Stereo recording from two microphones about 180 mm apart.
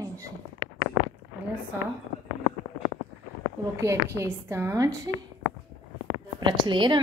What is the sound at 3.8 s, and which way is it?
A woman's voice, 15° right (ahead or behind).